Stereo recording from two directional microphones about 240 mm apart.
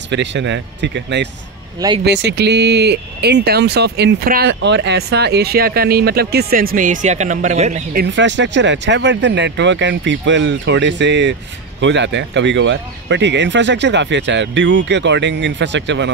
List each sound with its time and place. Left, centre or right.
0.1 s speech: right